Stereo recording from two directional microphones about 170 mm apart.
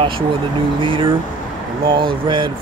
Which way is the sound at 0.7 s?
30° right (ahead or behind).